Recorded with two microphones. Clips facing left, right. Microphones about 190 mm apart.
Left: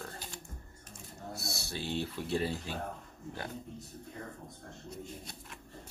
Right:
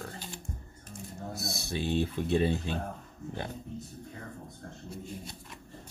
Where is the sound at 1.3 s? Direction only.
20° right (ahead or behind).